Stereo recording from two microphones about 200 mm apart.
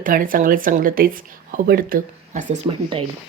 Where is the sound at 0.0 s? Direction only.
45° right (ahead or behind).